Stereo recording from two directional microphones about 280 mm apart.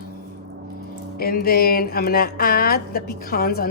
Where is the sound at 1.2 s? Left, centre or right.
Left.